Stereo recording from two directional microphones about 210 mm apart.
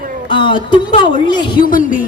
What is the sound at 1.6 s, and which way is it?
Speech, 40° left (ahead or behind).